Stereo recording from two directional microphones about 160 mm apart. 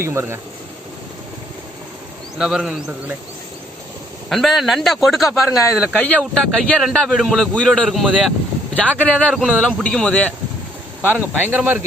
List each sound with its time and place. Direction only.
0.0 s speech: 15° right (ahead or behind)
2.4 s a man's voice: 5° right (ahead or behind)
4.3 s a man's voice: centre (ahead or behind)
6.0 s a man's voice: 5° left (ahead or behind)
11.1 s speech: 10° right (ahead or behind)